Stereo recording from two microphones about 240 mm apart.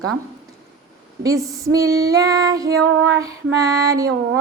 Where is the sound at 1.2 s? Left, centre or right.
Centre.